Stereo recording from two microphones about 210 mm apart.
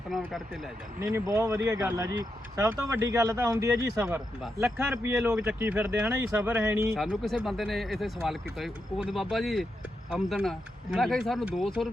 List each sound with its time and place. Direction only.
0.1 s speech: centre (ahead or behind)
0.9 s speech: 15° right (ahead or behind)
4.0 s speech: 5° right (ahead or behind)
6.9 s speech: centre (ahead or behind)